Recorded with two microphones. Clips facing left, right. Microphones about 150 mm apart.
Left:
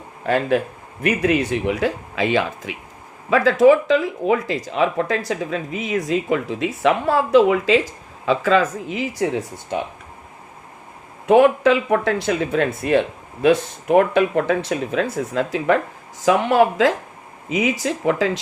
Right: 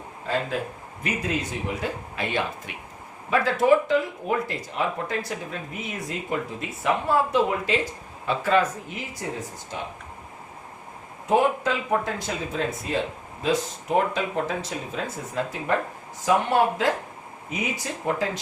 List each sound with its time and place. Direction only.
0.3 s speech: 70° left (ahead or behind)
11.3 s speech: 80° left